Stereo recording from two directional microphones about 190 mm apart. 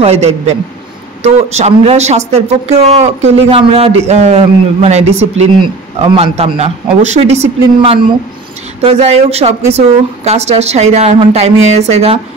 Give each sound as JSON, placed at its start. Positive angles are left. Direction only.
{"t": 0.0, "sound": "speech", "side_deg": -35}